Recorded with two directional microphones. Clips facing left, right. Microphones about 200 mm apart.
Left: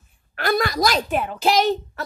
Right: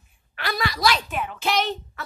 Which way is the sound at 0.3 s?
50° left (ahead or behind).